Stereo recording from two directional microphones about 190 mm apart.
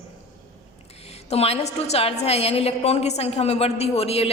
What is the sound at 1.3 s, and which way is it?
A woman's voice, 35° left (ahead or behind).